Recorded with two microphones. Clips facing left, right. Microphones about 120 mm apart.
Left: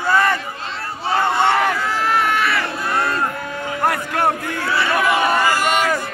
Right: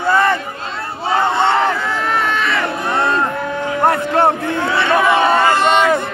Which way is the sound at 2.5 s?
25° right (ahead or behind).